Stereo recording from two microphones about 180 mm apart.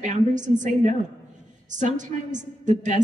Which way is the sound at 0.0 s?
45° right (ahead or behind).